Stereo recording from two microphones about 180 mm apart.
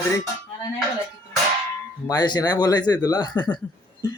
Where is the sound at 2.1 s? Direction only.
20° left (ahead or behind).